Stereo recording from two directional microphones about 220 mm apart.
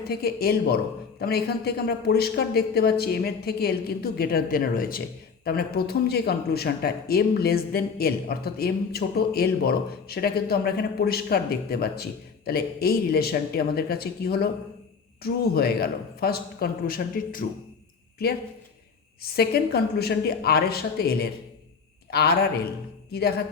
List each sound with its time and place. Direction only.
0.1 s speech: 45° left (ahead or behind)
19.2 s a man's voice: 45° left (ahead or behind)